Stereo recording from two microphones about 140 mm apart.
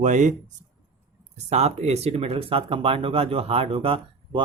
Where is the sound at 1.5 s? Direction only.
50° right (ahead or behind).